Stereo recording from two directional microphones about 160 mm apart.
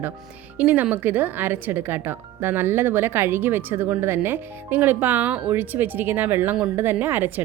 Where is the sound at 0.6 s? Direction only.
10° right (ahead or behind).